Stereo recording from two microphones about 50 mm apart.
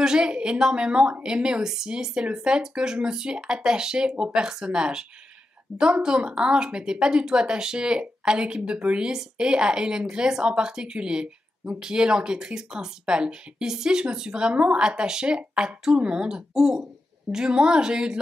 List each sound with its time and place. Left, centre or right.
0.0 s a woman's voice: centre